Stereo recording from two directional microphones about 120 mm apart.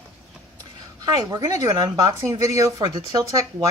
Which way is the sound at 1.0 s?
30° right (ahead or behind).